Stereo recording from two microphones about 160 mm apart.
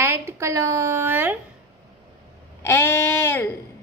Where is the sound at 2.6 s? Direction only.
15° left (ahead or behind).